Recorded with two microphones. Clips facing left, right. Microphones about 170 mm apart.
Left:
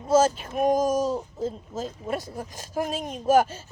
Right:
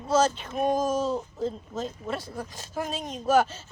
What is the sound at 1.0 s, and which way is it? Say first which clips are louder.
A woman's voice: left 1 dB; 10° left (ahead or behind).